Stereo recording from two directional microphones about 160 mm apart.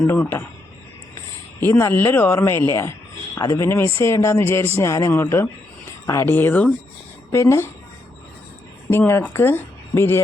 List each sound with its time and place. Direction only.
0.1 s speech: 15° left (ahead or behind)
1.6 s a woman's voice: 15° left (ahead or behind)
8.9 s speech: 15° left (ahead or behind)